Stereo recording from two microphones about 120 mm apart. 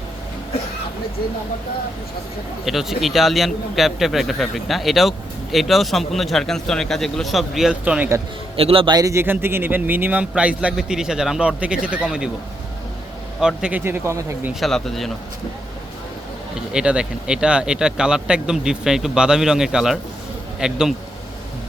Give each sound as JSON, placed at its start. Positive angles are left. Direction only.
{"t": 2.6, "sound": "a man's voice", "side_deg": 0}
{"t": 8.5, "sound": "a man's voice", "side_deg": -50}
{"t": 9.0, "sound": "speech", "side_deg": -25}
{"t": 13.4, "sound": "speech", "side_deg": -5}
{"t": 14.6, "sound": "a man's voice", "side_deg": 0}
{"t": 16.7, "sound": "a man's voice", "side_deg": -10}